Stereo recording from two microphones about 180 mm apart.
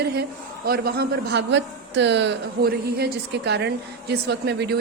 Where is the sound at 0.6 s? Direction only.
60° right (ahead or behind).